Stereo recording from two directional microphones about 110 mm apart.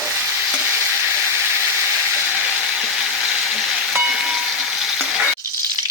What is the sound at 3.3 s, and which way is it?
Frying, 5° right (ahead or behind).